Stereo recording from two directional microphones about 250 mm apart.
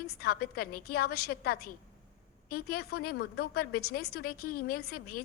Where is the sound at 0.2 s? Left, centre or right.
Left.